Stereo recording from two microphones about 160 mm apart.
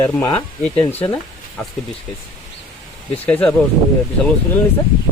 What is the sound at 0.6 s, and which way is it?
Speech, 10° left (ahead or behind).